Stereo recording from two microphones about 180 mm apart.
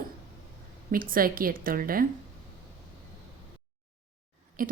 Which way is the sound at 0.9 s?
50° right (ahead or behind).